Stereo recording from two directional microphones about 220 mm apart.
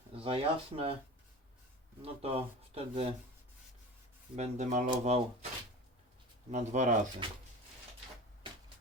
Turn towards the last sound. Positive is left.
turn(degrees=-30)  # may be behind; listen again after turning